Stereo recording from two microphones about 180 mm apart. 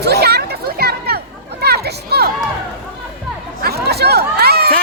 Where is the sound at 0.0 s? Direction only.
65° right (ahead or behind).